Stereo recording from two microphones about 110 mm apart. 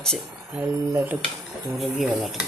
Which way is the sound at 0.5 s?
15° right (ahead or behind).